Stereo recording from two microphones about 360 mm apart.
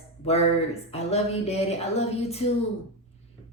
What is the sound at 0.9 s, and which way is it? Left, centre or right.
A woman's voice, centre.